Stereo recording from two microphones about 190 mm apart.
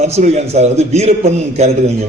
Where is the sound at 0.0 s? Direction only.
35° right (ahead or behind).